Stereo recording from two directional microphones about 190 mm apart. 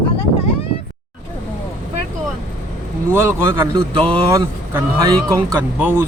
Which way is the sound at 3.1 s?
15° right (ahead or behind).